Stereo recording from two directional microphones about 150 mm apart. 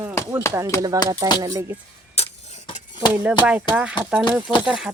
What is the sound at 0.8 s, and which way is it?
Speech, 25° right (ahead or behind).